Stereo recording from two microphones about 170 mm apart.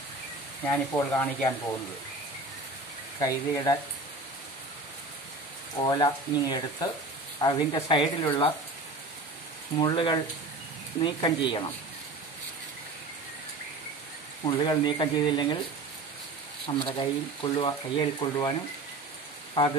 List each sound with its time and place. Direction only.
0.7 s speech: 10° left (ahead or behind)
3.2 s speech: 20° left (ahead or behind)
5.8 s speech: 25° left (ahead or behind)
9.8 s speech: 25° left (ahead or behind)
14.4 s speech: 25° left (ahead or behind)
16.6 s speech: 30° left (ahead or behind)